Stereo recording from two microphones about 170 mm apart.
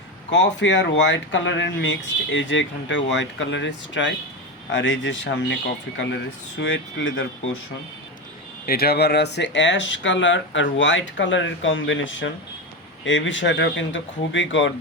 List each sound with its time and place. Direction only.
0.3 s speech: 90° left
6.6 s speech: 90° left
8.6 s speech: 65° left (ahead or behind); by 14.7 s 90° left